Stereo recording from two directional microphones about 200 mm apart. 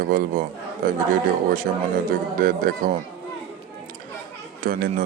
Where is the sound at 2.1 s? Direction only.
45° right (ahead or behind).